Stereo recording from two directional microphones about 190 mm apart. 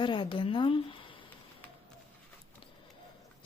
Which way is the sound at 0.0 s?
25° left (ahead or behind).